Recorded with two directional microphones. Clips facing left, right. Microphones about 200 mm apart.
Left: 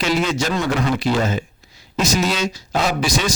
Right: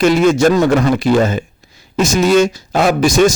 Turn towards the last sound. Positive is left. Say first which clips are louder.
# right 9 dB
turn(degrees=-50)  # may be behind; listen again after turning